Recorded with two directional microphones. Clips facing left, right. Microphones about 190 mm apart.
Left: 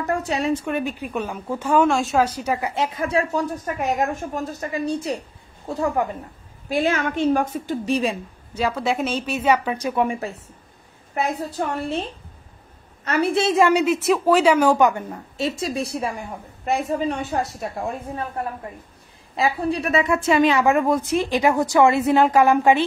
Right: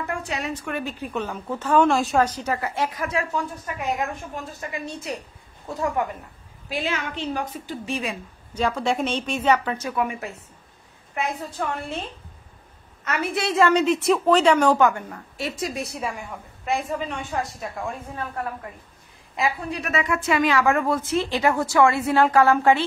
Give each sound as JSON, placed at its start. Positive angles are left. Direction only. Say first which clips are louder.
{"t": 0.0, "sound": "a woman's voice", "louder": "left 6 dB", "side_deg": 40}
{"t": 1.9, "sound": "speech", "louder": "left 1 dB", "side_deg": 0}
{"t": 6.7, "sound": "a woman's voice", "louder": "left 7 dB", "side_deg": 45}
{"t": 8.5, "sound": "a woman's voice", "louder": "left 1 dB", "side_deg": 5}
{"t": 9.9, "sound": "a woman's voice", "louder": "left 4 dB", "side_deg": 30}